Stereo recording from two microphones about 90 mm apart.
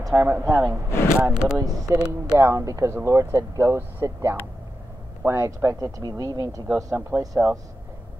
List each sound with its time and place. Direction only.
0.1 s speech: 25° right (ahead or behind)
0.5 s speech: 35° right (ahead or behind)
0.8 s a sound: 30° left (ahead or behind)
1.2 s speech: 10° right (ahead or behind)
1.6 s speech: 45° right (ahead or behind)
2.3 s speech: 35° right (ahead or behind)
7.2 s speech: 25° right (ahead or behind)